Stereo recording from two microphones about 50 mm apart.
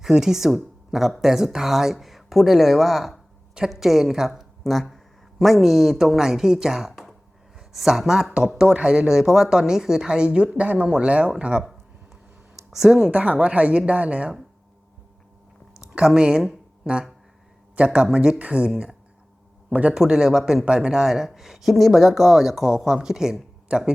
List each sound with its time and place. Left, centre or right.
0.0 s speech: centre
4.6 s speech: centre
8.3 s speech: centre
12.7 s speech: centre
13.1 s a woman's voice: right
15.9 s speech: centre
16.8 s a sound: centre
17.7 s a woman's voice: right
19.9 s speech: centre